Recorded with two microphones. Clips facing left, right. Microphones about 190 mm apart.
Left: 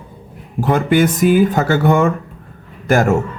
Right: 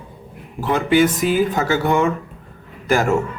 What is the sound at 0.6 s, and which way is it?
A man's voice, 45° left (ahead or behind).